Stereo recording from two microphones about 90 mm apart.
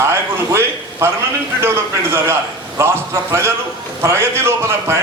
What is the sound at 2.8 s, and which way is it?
A man's voice, 30° right (ahead or behind).